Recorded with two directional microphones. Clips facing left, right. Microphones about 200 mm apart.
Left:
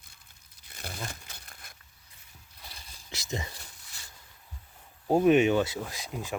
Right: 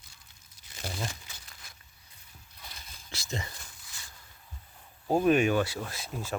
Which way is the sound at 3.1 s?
20° left (ahead or behind).